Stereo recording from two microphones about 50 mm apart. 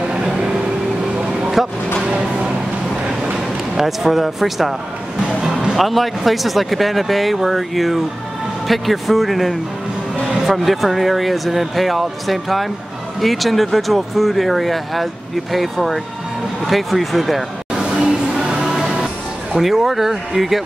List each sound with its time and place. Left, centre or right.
0.0 s vehicle: centre
1.4 s a sound: centre
2.0 s speech: right
3.3 s speech: centre
17.9 s music: centre
18.7 s music: centre
19.5 s speech: centre